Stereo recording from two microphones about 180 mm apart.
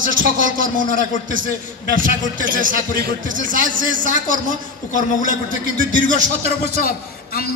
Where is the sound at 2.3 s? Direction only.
50° right (ahead or behind).